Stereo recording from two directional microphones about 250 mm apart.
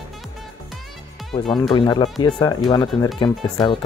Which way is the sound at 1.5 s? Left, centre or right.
Centre.